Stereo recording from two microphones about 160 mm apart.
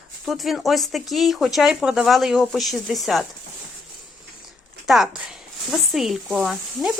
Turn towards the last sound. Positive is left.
turn(degrees=0)  # may be behind; listen again after turning